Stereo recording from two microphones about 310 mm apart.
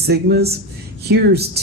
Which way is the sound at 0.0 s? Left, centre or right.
Right.